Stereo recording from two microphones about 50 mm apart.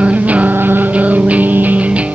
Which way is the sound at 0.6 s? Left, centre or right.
Right.